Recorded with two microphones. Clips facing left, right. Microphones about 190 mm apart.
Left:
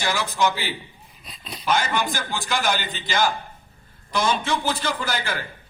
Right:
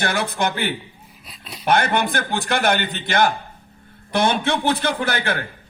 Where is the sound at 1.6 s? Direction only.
60° right (ahead or behind).